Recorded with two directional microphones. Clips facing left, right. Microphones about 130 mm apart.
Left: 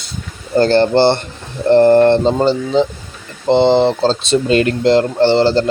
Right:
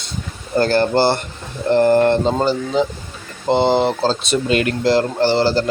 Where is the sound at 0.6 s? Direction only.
25° left (ahead or behind).